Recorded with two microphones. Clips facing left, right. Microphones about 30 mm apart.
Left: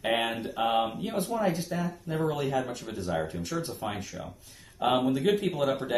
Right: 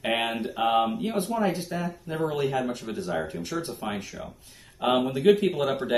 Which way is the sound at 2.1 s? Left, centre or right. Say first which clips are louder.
Right 3 dB; right.